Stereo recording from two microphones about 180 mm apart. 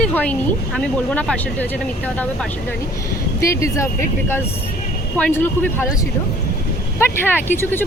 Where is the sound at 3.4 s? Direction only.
15° left (ahead or behind).